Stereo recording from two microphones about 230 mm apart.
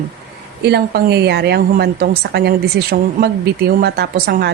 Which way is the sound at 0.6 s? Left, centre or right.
Right.